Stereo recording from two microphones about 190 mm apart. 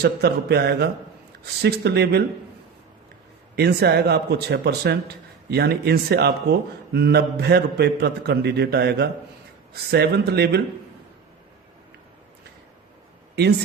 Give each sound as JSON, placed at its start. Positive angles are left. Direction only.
{"t": 0.0, "sound": "speech", "side_deg": -60}
{"t": 3.5, "sound": "speech", "side_deg": -60}